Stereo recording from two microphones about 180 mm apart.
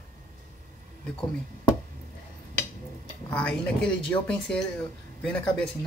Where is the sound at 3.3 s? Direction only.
5° left (ahead or behind).